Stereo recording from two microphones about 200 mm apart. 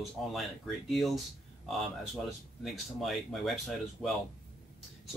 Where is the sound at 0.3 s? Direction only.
Centre (ahead or behind).